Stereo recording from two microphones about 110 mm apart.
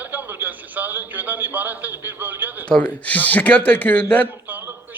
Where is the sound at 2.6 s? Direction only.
10° left (ahead or behind).